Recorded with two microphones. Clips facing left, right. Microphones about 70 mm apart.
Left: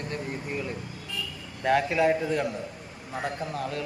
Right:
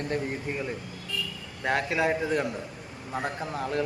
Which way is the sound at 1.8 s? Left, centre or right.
Centre.